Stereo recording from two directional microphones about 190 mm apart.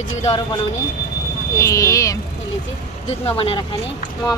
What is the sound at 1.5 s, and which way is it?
Speech, 15° left (ahead or behind).